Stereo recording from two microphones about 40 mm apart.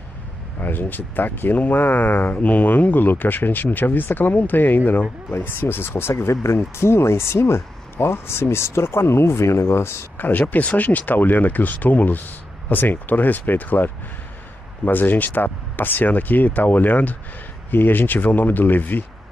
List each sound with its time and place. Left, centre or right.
0.6 s speech: left
2.3 s speech: left
5.3 s speech: left
10.1 s speech: left
17.6 s speech: left